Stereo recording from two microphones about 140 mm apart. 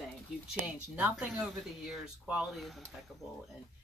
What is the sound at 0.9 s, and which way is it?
Speech, 10° right (ahead or behind).